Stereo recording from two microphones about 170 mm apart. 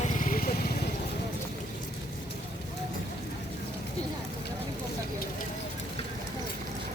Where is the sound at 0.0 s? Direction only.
50° left (ahead or behind).